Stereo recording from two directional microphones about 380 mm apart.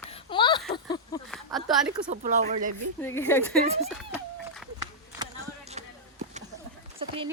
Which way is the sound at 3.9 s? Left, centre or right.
Centre.